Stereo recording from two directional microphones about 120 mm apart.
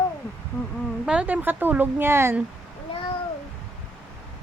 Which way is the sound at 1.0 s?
10° right (ahead or behind).